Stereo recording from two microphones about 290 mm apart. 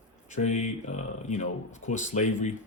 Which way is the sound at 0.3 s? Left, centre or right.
Left.